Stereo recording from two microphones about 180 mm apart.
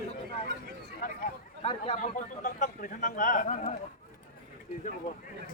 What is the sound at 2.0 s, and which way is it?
Speech, 45° left (ahead or behind).